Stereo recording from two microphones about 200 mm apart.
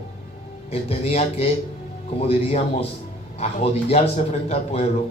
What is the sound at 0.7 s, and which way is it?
Speech, 30° left (ahead or behind).